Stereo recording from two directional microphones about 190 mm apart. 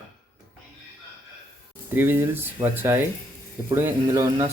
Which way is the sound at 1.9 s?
10° right (ahead or behind).